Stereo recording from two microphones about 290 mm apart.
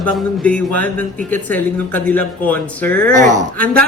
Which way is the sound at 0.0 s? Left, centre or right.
Centre.